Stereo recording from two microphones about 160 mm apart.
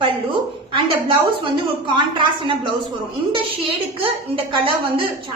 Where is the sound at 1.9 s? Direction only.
30° right (ahead or behind).